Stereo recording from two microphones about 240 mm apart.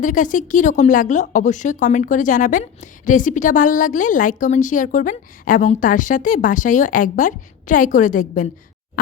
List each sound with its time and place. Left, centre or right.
0.0 s a woman's voice: left